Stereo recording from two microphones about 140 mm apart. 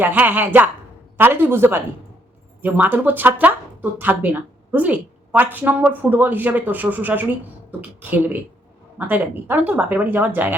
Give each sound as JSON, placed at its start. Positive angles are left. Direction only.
{"t": 0.0, "sound": "speech", "side_deg": -15}